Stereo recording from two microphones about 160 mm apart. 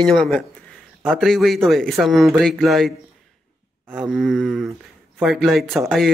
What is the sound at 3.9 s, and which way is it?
A man's voice, centre (ahead or behind).